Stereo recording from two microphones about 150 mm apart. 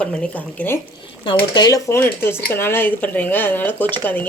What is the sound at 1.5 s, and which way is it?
A woman's voice, 25° left (ahead or behind).